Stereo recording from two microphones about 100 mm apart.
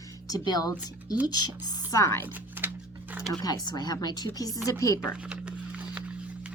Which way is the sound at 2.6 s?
20° right (ahead or behind).